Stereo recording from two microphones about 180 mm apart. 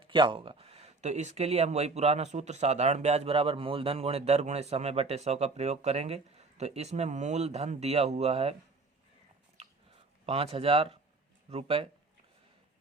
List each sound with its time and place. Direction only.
0.0 s speech: 25° right (ahead or behind)
10.2 s speech: 35° right (ahead or behind)